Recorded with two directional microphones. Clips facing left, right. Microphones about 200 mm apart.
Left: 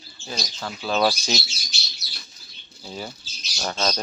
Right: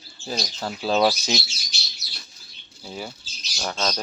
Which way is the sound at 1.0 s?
15° right (ahead or behind).